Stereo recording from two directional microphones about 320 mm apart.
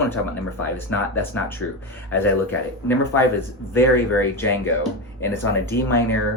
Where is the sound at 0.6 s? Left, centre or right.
Centre.